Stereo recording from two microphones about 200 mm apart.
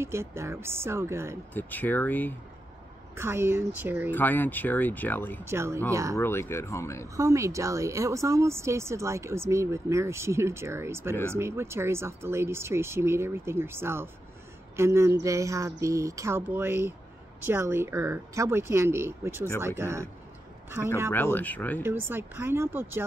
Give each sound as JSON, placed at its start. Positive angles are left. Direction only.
{"t": 0.0, "sound": "a woman's voice", "side_deg": -15}
{"t": 1.5, "sound": "speech", "side_deg": 10}
{"t": 3.2, "sound": "a woman's voice", "side_deg": -10}
{"t": 4.1, "sound": "speech", "side_deg": 10}
{"t": 5.4, "sound": "a woman's voice", "side_deg": -10}
{"t": 6.1, "sound": "speech", "side_deg": 10}
{"t": 7.2, "sound": "a woman's voice", "side_deg": -15}
{"t": 21.1, "sound": "speech", "side_deg": 10}
{"t": 21.8, "sound": "a woman's voice", "side_deg": -10}